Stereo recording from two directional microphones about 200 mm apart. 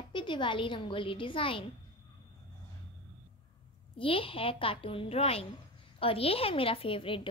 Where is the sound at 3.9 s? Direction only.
25° left (ahead or behind).